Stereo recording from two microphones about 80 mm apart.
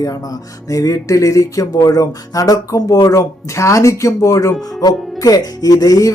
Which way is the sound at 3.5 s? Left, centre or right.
Left.